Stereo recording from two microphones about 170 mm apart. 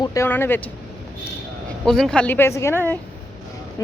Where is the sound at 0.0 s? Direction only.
20° left (ahead or behind).